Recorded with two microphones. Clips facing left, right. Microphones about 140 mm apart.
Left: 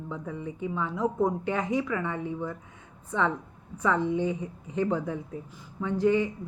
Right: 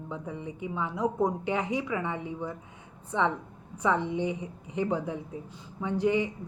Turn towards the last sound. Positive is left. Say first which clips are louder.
# left 2 dB
turn(degrees=-15)  # may be behind; listen again after turning